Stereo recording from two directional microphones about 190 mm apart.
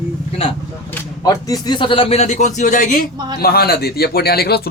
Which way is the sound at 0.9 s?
20° left (ahead or behind).